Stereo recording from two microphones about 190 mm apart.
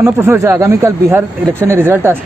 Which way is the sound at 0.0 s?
15° right (ahead or behind).